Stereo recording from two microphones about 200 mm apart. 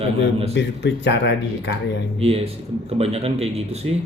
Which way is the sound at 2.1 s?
30° right (ahead or behind).